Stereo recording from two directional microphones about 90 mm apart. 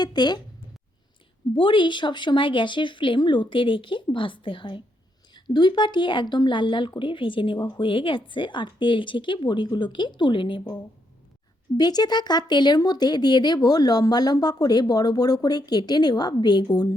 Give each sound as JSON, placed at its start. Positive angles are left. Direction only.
{"t": 0.0, "sound": "speech", "side_deg": 50}
{"t": 1.5, "sound": "speech", "side_deg": 65}
{"t": 5.3, "sound": "speech", "side_deg": 60}
{"t": 11.8, "sound": "speech", "side_deg": 50}